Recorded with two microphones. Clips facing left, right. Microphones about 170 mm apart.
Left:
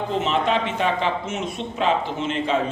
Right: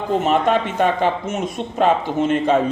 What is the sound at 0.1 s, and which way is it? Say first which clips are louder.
Speech: right 6 dB; 50° right (ahead or behind).